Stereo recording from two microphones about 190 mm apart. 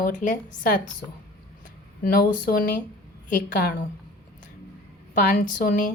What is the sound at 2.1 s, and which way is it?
A woman's voice, 50° left (ahead or behind).